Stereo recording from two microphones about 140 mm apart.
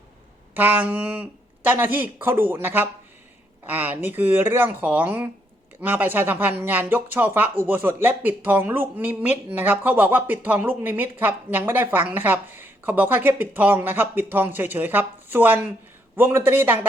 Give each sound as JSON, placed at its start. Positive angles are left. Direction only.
{"t": 0.5, "sound": "speech", "side_deg": -10}